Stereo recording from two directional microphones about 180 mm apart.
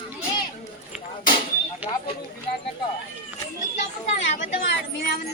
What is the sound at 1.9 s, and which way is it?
Speech, 25° left (ahead or behind).